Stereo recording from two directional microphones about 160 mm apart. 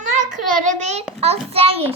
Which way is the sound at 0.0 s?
55° right (ahead or behind).